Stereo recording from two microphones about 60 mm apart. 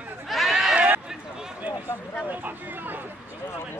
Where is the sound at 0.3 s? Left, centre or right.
Centre.